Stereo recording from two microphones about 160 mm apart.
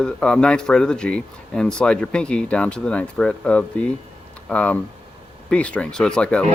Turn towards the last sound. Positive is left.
turn(degrees=5)  # may be behind; listen again after turning